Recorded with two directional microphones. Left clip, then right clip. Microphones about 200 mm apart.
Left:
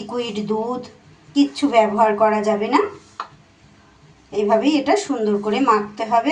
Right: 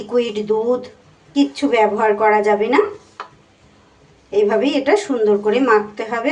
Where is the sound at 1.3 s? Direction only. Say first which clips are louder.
Right 2 dB; 20° right (ahead or behind).